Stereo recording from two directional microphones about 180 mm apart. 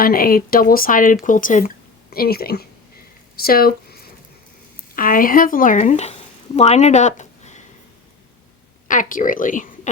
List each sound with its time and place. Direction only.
0.0 s speech: 55° left (ahead or behind)
3.3 s a sound: 55° left (ahead or behind)
4.9 s speech: 50° left (ahead or behind)
8.9 s speech: 45° left (ahead or behind)